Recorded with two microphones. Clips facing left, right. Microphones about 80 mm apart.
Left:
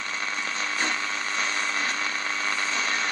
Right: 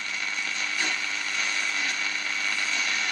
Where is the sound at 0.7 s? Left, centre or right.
Left.